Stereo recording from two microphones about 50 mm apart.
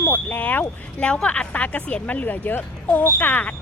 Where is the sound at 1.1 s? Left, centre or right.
Left.